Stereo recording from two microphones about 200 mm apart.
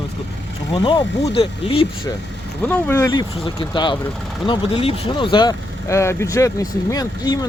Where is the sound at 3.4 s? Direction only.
25° left (ahead or behind).